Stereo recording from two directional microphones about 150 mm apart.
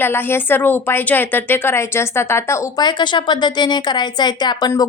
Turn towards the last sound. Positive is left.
turn(degrees=25)  # may be behind; listen again after turning